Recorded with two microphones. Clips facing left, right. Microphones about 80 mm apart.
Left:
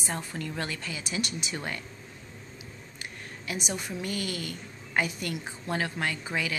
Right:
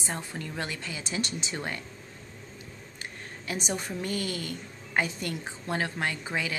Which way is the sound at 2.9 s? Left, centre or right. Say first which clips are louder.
Even; right.